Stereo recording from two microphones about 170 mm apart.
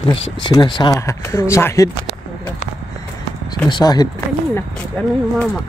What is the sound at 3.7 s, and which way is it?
Speech, 25° left (ahead or behind).